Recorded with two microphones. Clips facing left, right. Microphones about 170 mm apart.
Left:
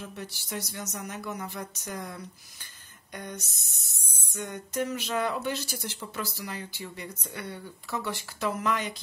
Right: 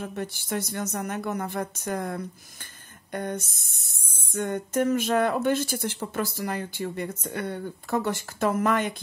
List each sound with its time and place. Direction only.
0.0 s speech: 55° right (ahead or behind)